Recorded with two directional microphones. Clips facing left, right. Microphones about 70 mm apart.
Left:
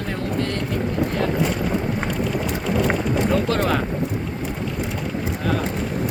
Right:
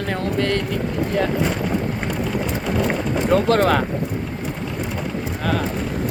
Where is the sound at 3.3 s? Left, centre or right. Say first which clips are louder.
Right 8 dB; right.